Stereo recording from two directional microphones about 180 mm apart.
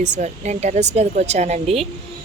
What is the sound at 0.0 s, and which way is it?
Speech, 40° right (ahead or behind).